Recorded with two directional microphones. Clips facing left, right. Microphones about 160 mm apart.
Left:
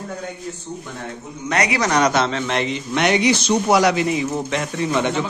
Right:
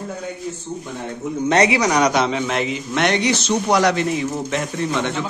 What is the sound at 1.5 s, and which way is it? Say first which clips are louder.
Speech: right 4 dB; 30° right (ahead or behind).